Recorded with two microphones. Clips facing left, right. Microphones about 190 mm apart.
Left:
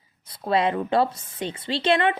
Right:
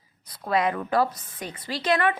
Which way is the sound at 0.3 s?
30° left (ahead or behind).